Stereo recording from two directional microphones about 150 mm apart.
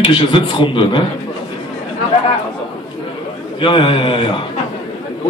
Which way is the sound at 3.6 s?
35° left (ahead or behind).